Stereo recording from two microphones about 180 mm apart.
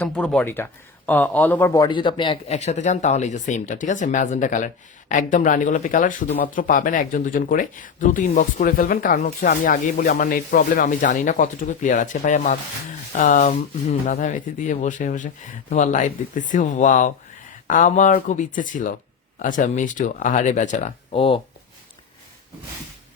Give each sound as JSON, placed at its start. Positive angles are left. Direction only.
{"t": 0.0, "sound": "a man's voice", "side_deg": 5}